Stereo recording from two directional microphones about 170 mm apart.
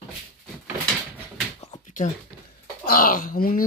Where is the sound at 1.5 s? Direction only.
40° left (ahead or behind).